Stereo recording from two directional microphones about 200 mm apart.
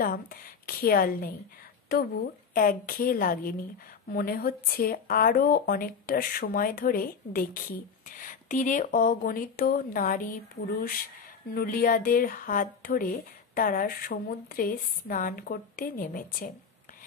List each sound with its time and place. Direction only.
0.0 s a woman's voice: 45° left (ahead or behind)
2.5 s a woman's voice: 45° left (ahead or behind)